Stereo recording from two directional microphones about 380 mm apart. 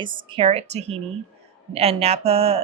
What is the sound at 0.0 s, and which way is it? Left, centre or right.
Speech, centre.